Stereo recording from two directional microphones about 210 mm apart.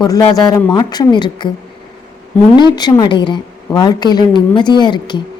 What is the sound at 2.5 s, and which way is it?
A woman's voice, 20° left (ahead or behind).